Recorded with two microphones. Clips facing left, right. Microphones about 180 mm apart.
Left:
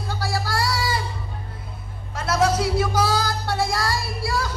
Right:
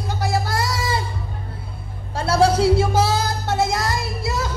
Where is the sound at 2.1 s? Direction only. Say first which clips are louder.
Right 4 dB; 30° right (ahead or behind).